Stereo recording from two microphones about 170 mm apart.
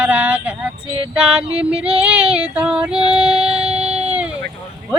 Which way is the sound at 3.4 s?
35° right (ahead or behind).